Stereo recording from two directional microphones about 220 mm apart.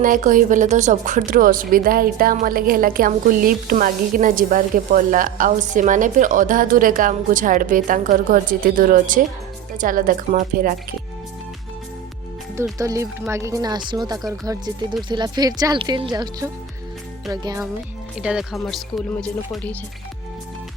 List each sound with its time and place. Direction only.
0.0 s speech: 35° right (ahead or behind)
12.8 s speech: 15° right (ahead or behind)
18.2 s speech: 5° right (ahead or behind)